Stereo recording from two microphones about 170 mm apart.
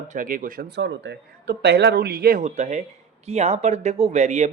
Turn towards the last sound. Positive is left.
turn(degrees=-45)  # may be behind; listen again after turning